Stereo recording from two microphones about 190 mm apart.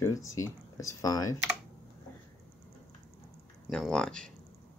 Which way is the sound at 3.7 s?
5° left (ahead or behind).